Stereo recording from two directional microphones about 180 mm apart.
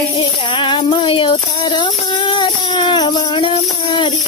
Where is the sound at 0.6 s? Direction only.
25° left (ahead or behind).